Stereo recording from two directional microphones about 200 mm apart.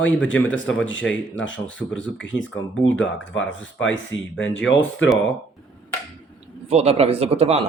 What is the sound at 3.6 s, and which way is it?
Speech, 70° left (ahead or behind).